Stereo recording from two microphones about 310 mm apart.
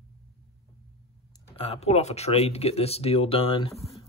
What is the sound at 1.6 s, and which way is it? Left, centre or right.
Speech, centre.